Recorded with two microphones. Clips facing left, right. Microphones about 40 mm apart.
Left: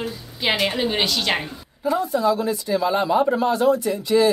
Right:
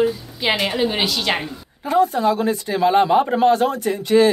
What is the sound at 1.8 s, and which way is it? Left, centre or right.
Speech, right.